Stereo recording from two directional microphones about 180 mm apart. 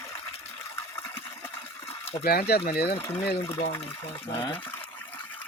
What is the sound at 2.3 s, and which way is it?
Speech, 60° left (ahead or behind).